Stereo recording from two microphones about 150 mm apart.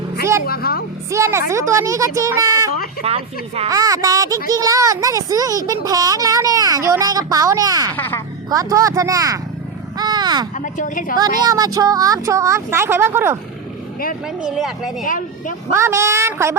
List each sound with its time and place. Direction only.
0.4 s a woman's voice: 90° left
1.1 s a child's voice: 20° right (ahead or behind)
3.0 s speech: 45° right (ahead or behind)
3.7 s a child's voice: 25° right (ahead or behind)
7.9 s speech: 15° left (ahead or behind)
8.4 s a child's voice: 25° right (ahead or behind)
10.0 s a sound: 25° right (ahead or behind)
10.6 s a woman's voice: 60° left (ahead or behind)
11.2 s a child's voice: 25° right (ahead or behind)
14.4 s speech: centre (ahead or behind)
15.0 s speech: 60° left (ahead or behind)
15.7 s a child's voice: 20° right (ahead or behind)